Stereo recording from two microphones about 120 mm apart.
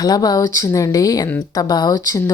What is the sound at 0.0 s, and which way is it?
Speech, 30° left (ahead or behind).